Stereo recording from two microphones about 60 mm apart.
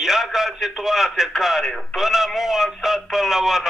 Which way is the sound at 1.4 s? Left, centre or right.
Centre.